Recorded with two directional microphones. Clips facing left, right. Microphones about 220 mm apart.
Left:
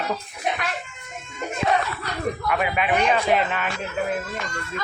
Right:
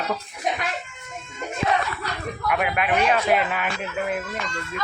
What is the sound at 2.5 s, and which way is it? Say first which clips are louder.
A man's voice: right 1 dB; centre (ahead or behind).